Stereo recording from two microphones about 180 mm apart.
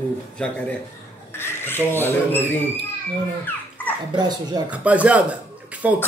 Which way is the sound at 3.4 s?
10° left (ahead or behind).